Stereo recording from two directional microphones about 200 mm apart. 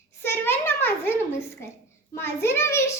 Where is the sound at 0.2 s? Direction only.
10° left (ahead or behind).